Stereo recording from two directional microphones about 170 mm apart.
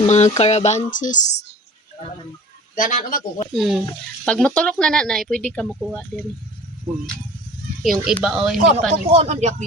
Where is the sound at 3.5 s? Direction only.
Centre (ahead or behind).